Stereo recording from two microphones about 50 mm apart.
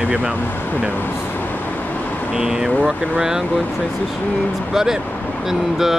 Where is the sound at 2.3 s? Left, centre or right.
Centre.